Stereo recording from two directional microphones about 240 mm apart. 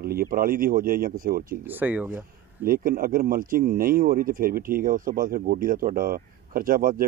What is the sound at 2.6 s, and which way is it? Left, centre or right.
Speech, right.